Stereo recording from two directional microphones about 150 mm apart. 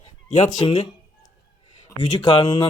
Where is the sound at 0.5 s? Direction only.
30° left (ahead or behind).